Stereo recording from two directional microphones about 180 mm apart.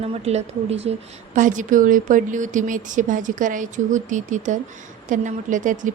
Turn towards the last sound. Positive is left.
turn(degrees=-45)  # may be behind; listen again after turning